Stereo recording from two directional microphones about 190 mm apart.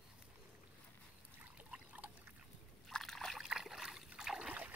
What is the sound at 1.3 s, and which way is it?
Trickle, 10° right (ahead or behind).